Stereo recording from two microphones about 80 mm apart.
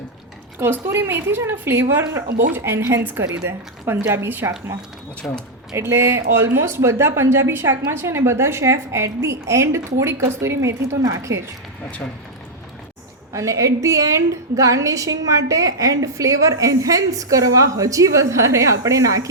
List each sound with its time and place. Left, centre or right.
0.6 s a woman's voice: right
5.2 s speech: centre
5.7 s a woman's voice: right
13.3 s a woman's voice: right